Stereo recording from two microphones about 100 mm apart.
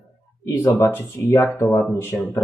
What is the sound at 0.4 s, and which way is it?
Speech, 30° left (ahead or behind).